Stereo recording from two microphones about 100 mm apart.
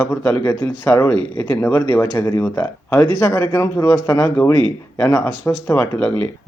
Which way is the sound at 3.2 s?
30° left (ahead or behind).